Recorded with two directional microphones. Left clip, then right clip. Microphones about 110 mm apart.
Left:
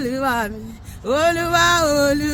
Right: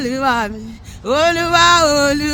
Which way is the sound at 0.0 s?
45° right (ahead or behind).